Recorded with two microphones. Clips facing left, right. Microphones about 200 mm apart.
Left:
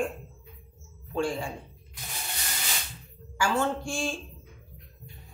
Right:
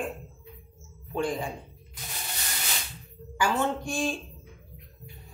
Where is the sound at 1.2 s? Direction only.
20° right (ahead or behind).